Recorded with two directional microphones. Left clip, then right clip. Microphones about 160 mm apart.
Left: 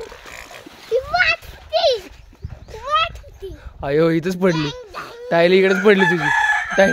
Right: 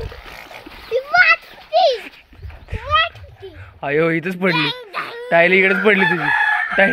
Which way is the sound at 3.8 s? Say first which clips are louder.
Even; 55° left (ahead or behind).